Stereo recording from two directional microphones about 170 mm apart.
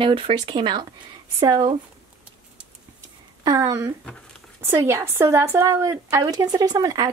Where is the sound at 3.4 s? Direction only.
20° right (ahead or behind).